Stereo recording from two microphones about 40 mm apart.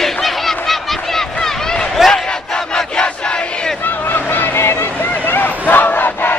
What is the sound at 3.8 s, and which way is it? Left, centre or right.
Vehicle, left.